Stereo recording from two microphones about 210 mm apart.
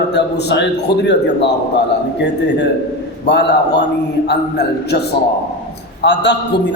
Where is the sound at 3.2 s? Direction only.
55° left (ahead or behind).